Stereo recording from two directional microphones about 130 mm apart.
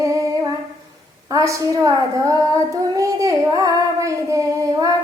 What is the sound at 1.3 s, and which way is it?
Child singing, 25° right (ahead or behind).